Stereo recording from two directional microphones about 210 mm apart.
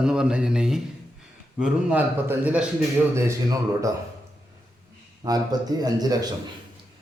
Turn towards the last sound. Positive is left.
turn(degrees=-20)  # may be behind; listen again after turning